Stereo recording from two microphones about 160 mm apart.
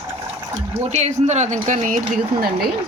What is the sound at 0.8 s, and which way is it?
Speech, 45° right (ahead or behind).